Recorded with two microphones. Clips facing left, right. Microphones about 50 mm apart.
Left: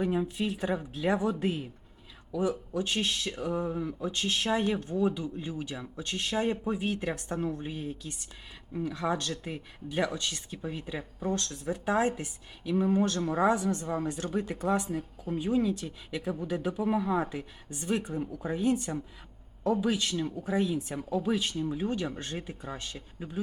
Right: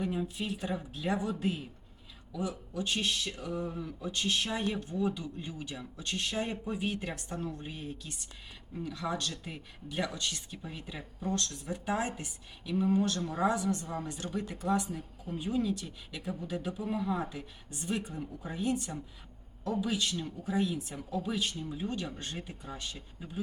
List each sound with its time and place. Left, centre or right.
0.0 s speech: left
8.8 s speech: left